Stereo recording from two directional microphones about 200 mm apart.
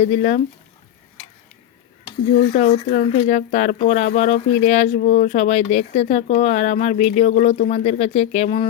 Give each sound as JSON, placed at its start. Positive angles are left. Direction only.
{"t": 0.0, "sound": "speech", "side_deg": 35}
{"t": 2.6, "sound": "speech", "side_deg": 30}